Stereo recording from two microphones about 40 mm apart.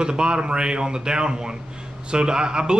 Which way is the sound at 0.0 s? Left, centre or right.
Right.